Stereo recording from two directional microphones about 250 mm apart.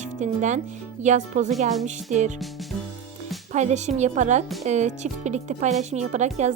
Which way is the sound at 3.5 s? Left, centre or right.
Right.